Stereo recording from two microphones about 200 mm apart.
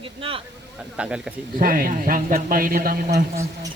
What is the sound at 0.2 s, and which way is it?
Speech, 25° right (ahead or behind).